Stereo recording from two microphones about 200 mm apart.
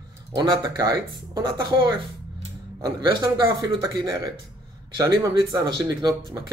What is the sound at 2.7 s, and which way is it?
Speech, 20° right (ahead or behind).